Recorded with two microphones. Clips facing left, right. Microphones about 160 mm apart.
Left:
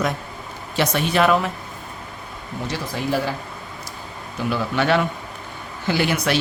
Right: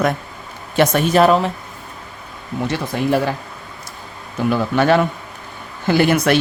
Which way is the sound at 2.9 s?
60° right (ahead or behind).